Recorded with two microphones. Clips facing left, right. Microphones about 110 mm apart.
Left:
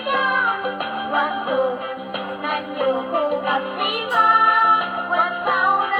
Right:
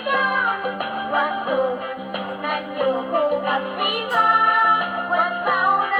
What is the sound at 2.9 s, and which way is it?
Music, 15° left (ahead or behind).